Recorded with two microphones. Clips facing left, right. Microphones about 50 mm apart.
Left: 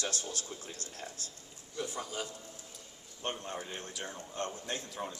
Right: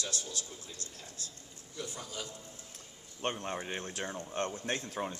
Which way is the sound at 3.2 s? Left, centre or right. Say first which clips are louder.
Right 3 dB; right.